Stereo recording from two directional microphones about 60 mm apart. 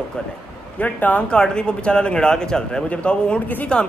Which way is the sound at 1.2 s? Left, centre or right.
Centre.